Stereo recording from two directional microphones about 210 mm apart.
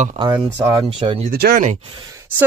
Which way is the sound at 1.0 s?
25° right (ahead or behind).